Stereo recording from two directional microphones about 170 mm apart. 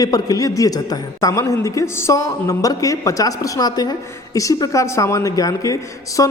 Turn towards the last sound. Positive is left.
turn(degrees=20)  # may be behind; listen again after turning